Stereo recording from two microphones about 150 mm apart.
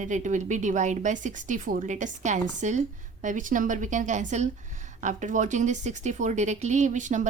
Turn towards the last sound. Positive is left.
turn(degrees=-55)  # may be behind; listen again after turning